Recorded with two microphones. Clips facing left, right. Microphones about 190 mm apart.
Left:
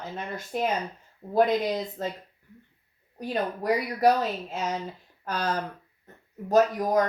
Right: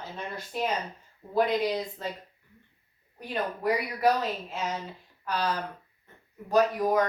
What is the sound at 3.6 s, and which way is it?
Speech, 40° left (ahead or behind).